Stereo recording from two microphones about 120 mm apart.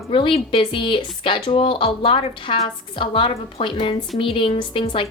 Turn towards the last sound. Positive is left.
turn(degrees=45)  # may be behind; listen again after turning